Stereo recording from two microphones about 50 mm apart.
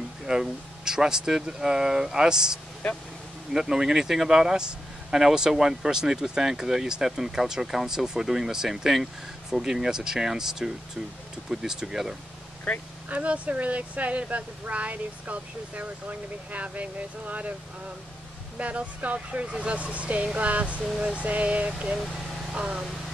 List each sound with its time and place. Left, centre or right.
0.3 s speech: centre
2.8 s speech: centre
3.5 s speech: centre
13.1 s speech: right
18.6 s speech: right